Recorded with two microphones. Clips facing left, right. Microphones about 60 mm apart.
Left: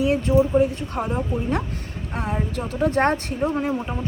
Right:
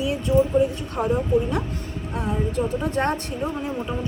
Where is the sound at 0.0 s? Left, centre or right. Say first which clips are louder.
Left 3 dB; left.